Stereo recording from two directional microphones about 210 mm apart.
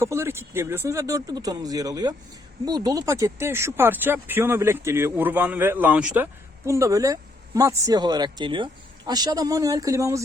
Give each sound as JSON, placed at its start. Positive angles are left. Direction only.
{"t": 0.0, "sound": "speech", "side_deg": -10}